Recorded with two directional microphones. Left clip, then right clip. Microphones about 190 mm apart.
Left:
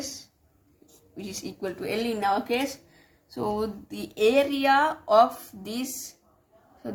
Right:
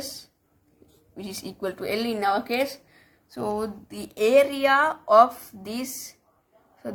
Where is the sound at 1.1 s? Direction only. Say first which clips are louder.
Even; 30° right (ahead or behind).